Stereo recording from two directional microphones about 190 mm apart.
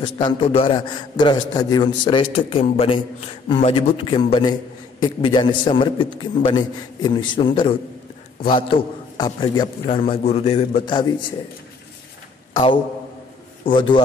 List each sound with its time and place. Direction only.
0.0 s a man's voice: 25° left (ahead or behind)
13.7 s a man's voice: 25° left (ahead or behind)